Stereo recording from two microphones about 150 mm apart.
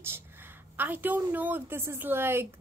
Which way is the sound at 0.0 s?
15° right (ahead or behind).